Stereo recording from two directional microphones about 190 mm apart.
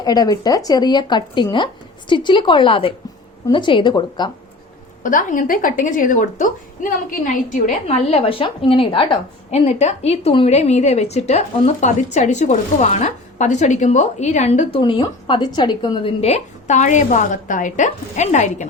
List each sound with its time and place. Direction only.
0.0 s speech: 20° left (ahead or behind)
5.0 s a woman's voice: 45° left (ahead or behind)
14.8 s a woman's voice: 25° left (ahead or behind)